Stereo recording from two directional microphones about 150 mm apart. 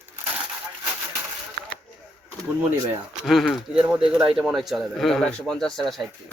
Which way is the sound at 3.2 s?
Centre (ahead or behind).